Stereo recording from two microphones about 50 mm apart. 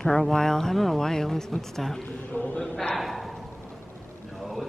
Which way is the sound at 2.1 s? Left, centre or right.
Left.